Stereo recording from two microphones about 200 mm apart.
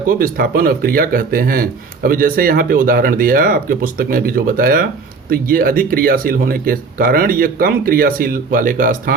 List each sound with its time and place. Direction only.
0.1 s speech: 45° right (ahead or behind)